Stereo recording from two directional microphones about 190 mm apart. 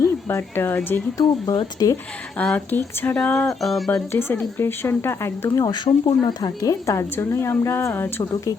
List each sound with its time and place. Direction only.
0.0 s speech: 15° left (ahead or behind)
1.2 s speech: 20° left (ahead or behind)
2.4 s speech: 10° left (ahead or behind)